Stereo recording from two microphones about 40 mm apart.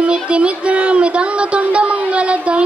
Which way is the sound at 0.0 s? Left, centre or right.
Right.